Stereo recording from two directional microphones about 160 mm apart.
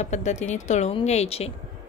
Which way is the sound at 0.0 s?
45° left (ahead or behind).